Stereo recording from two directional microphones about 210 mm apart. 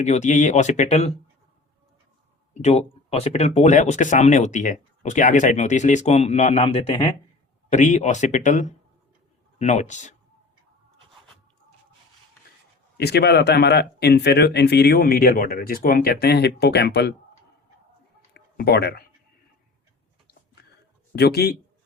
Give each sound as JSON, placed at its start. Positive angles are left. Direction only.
{"t": 0.0, "sound": "speech", "side_deg": 35}
{"t": 2.5, "sound": "speech", "side_deg": 30}
{"t": 13.0, "sound": "speech", "side_deg": 50}
{"t": 18.3, "sound": "speech", "side_deg": 50}
{"t": 21.2, "sound": "speech", "side_deg": 50}